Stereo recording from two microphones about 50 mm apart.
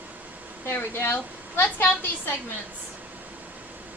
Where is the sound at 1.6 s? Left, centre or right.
Left.